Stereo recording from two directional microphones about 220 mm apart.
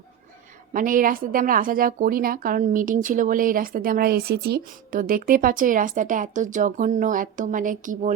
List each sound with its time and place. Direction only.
0.7 s a woman's voice: 40° right (ahead or behind)